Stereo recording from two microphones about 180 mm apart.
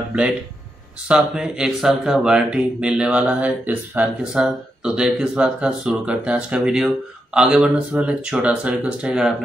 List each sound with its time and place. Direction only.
1.0 s speech: centre (ahead or behind)